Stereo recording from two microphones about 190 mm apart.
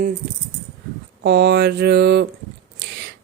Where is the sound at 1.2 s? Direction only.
60° right (ahead or behind).